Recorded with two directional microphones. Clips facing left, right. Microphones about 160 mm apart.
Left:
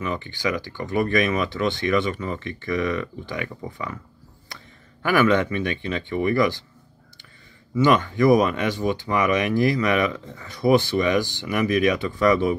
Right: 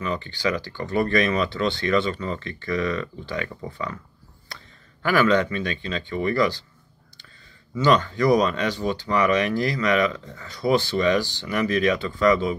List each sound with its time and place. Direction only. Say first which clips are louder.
0.0 s speech: even; 15° left (ahead or behind)
5.0 s speech: left 1 dB; 20° left (ahead or behind)
7.8 s speech: left 2 dB; 20° left (ahead or behind)